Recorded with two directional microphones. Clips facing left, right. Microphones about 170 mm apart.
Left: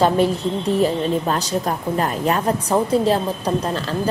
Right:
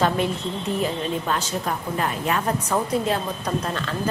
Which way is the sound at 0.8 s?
35° left (ahead or behind).